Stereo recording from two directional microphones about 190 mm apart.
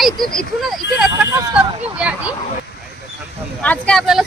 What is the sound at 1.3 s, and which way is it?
Speech, 15° right (ahead or behind).